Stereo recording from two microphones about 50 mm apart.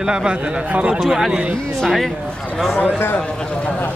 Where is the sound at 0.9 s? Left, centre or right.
Centre.